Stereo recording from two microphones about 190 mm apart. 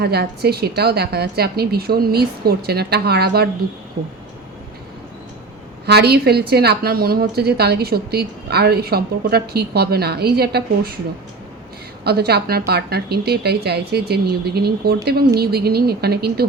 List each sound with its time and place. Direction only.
0.0 s a woman's voice: 55° right (ahead or behind)
5.8 s a woman's voice: 60° right (ahead or behind)
12.0 s a woman's voice: 55° right (ahead or behind)